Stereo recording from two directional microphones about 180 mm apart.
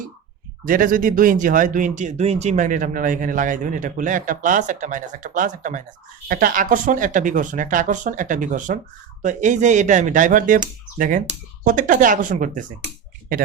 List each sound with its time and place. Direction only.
0.6 s speech: 50° right (ahead or behind)